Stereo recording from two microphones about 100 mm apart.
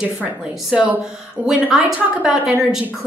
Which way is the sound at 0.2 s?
10° right (ahead or behind).